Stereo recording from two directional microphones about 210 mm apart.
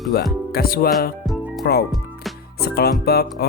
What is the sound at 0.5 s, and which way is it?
Speech, 45° left (ahead or behind).